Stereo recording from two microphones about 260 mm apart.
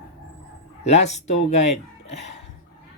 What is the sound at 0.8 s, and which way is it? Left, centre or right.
Speech, left.